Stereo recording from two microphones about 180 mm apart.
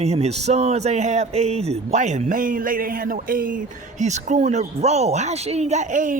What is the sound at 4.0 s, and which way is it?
Speech, 40° right (ahead or behind).